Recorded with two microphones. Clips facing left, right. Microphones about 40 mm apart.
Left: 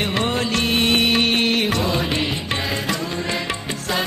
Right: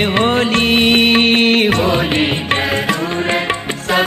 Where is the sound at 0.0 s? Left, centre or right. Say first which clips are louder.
Right 7 dB; right.